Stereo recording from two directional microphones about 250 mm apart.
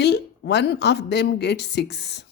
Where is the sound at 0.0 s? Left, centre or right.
Left.